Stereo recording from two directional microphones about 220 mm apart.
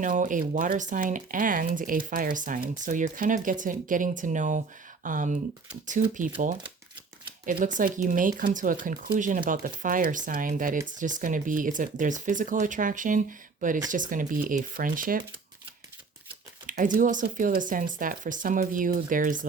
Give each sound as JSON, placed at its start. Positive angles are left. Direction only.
{"t": 0.0, "sound": "speech", "side_deg": -35}
{"t": 7.4, "sound": "speech", "side_deg": -35}
{"t": 16.6, "sound": "speech", "side_deg": -35}